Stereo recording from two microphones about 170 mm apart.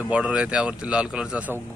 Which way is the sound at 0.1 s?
5° right (ahead or behind).